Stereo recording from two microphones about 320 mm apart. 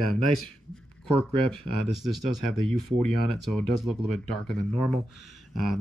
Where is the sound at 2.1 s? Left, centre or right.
Right.